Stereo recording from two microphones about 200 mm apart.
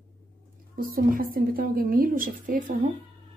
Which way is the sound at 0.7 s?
45° right (ahead or behind).